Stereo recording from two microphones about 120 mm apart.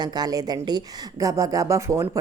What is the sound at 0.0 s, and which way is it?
A woman's voice, 35° right (ahead or behind).